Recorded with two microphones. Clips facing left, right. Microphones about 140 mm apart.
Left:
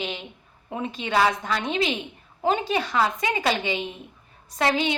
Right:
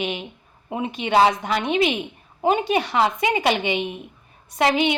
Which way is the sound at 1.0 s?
20° right (ahead or behind).